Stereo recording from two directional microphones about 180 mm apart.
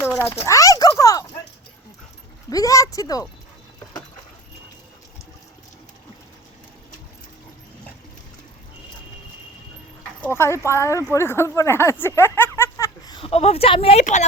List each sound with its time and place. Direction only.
0.4 s a sound: 20° left (ahead or behind)
2.5 s speech: 20° left (ahead or behind)
10.2 s speech: 15° left (ahead or behind); by 14.3 s 40° left (ahead or behind)